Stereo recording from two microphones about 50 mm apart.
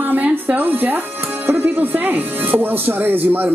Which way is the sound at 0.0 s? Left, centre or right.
Right.